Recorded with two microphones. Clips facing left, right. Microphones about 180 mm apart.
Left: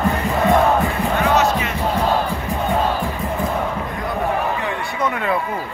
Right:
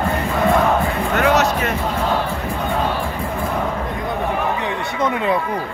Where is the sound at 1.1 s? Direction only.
70° right (ahead or behind).